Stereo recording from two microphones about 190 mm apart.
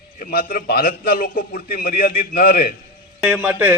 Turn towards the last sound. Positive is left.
turn(degrees=-10)  # may be behind; listen again after turning